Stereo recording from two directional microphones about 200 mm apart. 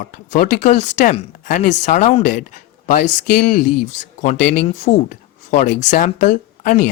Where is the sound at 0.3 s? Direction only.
40° left (ahead or behind).